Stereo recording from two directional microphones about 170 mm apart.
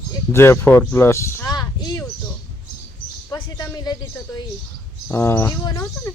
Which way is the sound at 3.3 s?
20° left (ahead or behind).